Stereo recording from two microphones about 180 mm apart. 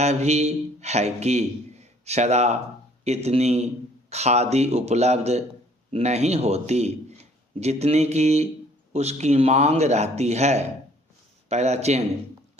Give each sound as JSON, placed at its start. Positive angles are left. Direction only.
{"t": 0.0, "sound": "speech", "side_deg": -35}